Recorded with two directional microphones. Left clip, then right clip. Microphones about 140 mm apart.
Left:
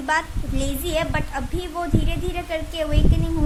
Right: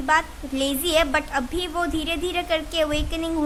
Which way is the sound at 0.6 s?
30° right (ahead or behind).